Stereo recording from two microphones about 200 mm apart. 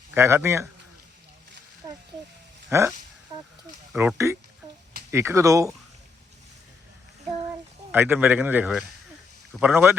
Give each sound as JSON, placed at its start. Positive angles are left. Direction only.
{"t": 0.1, "sound": "a man's voice", "side_deg": -10}
{"t": 1.8, "sound": "snake", "side_deg": -15}
{"t": 2.6, "sound": "speech", "side_deg": -15}
{"t": 3.9, "sound": "a man's voice", "side_deg": -10}
{"t": 7.9, "sound": "a man's voice", "side_deg": -10}